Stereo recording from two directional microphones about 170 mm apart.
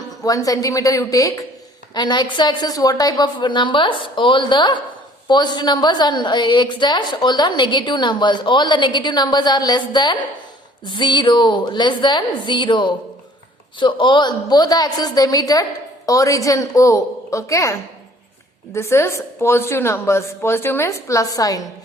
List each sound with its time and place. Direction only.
0.2 s a woman's voice: 20° left (ahead or behind)